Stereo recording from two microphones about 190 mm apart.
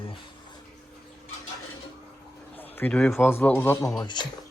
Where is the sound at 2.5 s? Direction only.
10° left (ahead or behind).